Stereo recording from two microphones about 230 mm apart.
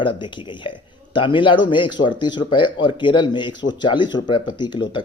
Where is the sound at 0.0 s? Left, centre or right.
Left.